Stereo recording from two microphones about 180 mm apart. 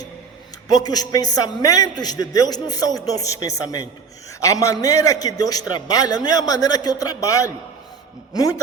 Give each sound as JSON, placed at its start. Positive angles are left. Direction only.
{"t": 0.7, "sound": "a man's voice", "side_deg": 20}